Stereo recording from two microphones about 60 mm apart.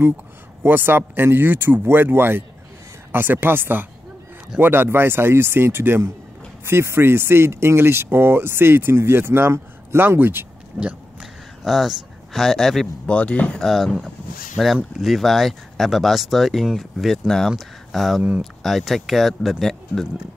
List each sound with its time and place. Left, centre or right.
0.6 s speech: right
10.8 s a sound: centre
11.6 s speech: centre
13.0 s speech: left
13.6 s speech: centre
14.6 s speech: centre